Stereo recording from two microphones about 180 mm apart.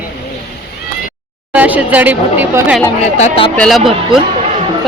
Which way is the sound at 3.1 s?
40° left (ahead or behind).